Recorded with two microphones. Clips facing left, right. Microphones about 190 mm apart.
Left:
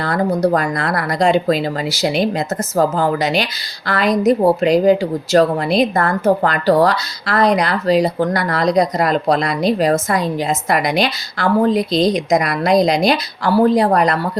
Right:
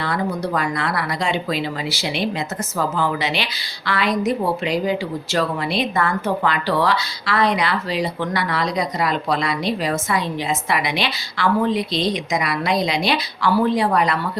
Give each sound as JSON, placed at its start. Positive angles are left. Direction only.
{"t": 0.0, "sound": "a woman's voice", "side_deg": 45}